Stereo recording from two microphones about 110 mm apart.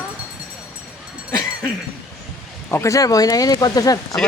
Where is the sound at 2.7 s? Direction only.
30° left (ahead or behind).